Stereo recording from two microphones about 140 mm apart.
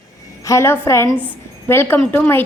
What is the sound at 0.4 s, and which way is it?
A woman's voice, 20° left (ahead or behind).